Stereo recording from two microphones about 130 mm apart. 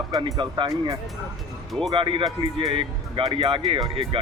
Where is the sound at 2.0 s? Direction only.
40° right (ahead or behind).